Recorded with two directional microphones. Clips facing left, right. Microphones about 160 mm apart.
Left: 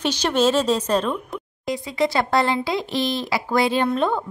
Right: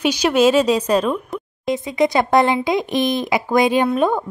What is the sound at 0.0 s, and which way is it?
Speech, 10° right (ahead or behind).